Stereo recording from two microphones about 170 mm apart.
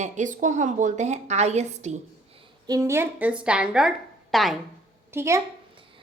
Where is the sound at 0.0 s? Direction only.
45° right (ahead or behind).